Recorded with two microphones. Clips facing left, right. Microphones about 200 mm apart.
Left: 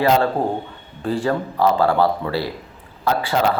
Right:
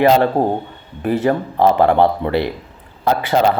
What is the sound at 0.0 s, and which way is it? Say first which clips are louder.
A man's voice: right 4 dB; 20° right (ahead or behind).